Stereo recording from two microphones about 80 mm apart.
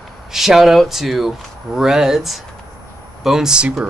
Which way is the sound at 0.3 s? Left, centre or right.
Centre.